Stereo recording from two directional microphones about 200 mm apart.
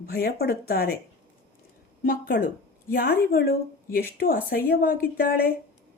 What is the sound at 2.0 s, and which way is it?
A woman's voice, 45° left (ahead or behind).